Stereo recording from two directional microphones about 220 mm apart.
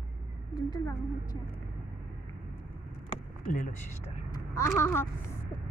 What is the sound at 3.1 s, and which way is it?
Speech, 35° left (ahead or behind).